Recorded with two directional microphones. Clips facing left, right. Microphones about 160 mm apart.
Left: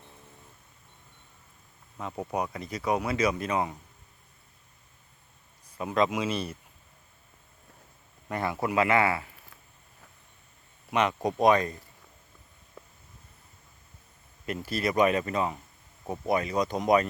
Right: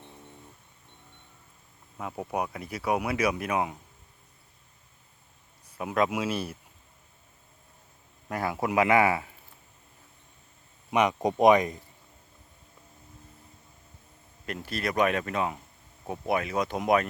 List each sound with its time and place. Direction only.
2.0 s speech: 5° right (ahead or behind)
5.7 s speech: 10° right (ahead or behind)
8.3 s speech: 5° right (ahead or behind)
10.9 s speech: 15° right (ahead or behind)
14.4 s speech: centre (ahead or behind)